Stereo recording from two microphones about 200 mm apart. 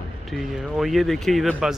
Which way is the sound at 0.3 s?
Centre (ahead or behind).